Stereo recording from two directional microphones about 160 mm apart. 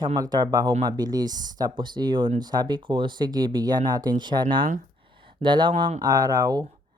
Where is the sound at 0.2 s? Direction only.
25° right (ahead or behind).